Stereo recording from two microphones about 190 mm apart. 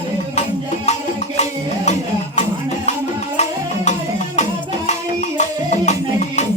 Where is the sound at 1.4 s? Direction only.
35° left (ahead or behind).